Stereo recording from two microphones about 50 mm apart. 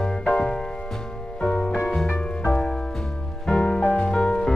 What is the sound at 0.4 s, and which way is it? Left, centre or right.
Music, centre.